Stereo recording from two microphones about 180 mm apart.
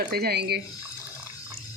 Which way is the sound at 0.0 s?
60° right (ahead or behind).